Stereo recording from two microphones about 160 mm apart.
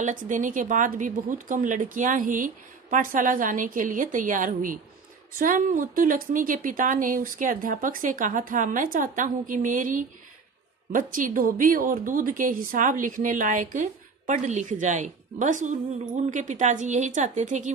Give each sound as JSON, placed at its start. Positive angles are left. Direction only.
{"t": 0.0, "sound": "a woman's voice", "side_deg": -55}